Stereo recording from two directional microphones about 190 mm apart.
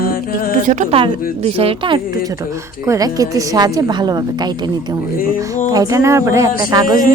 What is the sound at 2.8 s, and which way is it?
A woman's voice, 20° right (ahead or behind).